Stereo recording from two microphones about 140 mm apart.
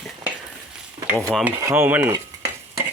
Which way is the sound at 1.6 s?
20° right (ahead or behind).